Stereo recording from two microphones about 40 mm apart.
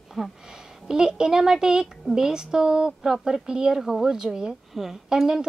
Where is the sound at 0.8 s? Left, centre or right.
Centre.